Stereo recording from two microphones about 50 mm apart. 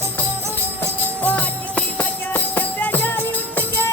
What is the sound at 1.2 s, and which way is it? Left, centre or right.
Music, left.